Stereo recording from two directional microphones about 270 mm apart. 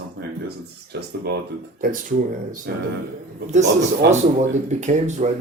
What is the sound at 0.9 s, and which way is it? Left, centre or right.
Speech, right.